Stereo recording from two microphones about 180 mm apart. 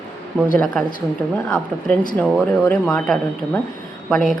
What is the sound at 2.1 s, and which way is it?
A woman's voice, 10° left (ahead or behind).